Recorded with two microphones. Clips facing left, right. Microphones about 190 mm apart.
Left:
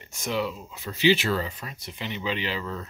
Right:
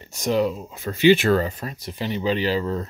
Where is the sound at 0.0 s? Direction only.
35° right (ahead or behind).